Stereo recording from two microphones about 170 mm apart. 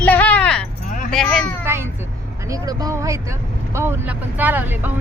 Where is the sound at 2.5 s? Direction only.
20° right (ahead or behind).